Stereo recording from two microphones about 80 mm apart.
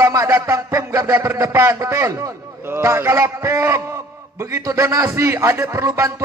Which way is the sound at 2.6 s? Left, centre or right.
Right.